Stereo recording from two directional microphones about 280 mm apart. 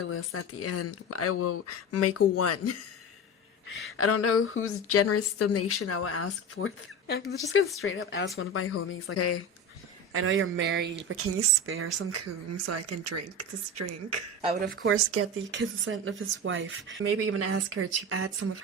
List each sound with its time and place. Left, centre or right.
0.0 s a woman's voice: left
3.7 s a woman's voice: left
7.8 s speech: left
8.4 s a woman's voice: left
10.1 s speech: right
14.4 s speech: right
14.7 s speech: right